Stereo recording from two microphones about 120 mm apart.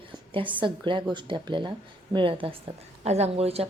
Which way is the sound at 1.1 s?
40° right (ahead or behind).